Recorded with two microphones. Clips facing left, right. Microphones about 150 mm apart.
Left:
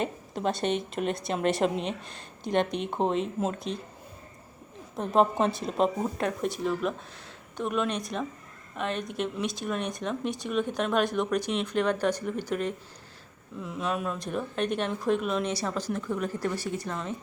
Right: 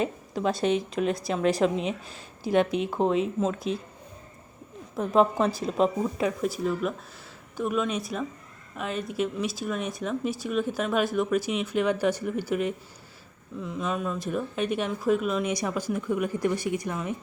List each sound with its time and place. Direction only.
0.5 s speech: centre (ahead or behind)
5.4 s speech: centre (ahead or behind)
5.7 s speech: 35° left (ahead or behind)
6.1 s speech: 5° right (ahead or behind)
13.6 s speech: centre (ahead or behind)